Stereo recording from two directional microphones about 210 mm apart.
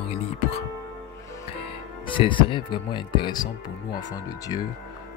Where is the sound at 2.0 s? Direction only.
25° left (ahead or behind).